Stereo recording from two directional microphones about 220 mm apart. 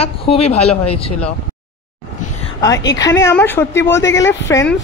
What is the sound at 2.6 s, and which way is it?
A woman's voice, 15° left (ahead or behind).